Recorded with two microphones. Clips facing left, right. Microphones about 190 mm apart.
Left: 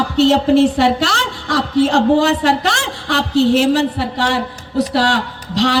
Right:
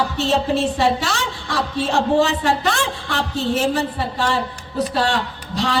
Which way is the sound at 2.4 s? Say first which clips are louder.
Left 3 dB; 80° left.